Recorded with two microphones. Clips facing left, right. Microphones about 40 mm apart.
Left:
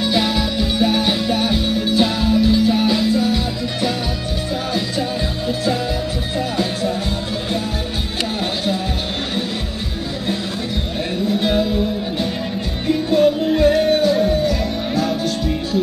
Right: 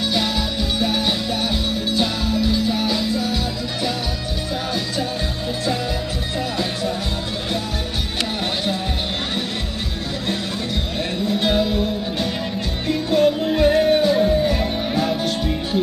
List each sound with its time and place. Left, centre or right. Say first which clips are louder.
0.0 s music: left 3 dB; centre
11.3 s music: left 1 dB; centre
12.8 s music: left 2 dB; centre
13.7 s music: even; centre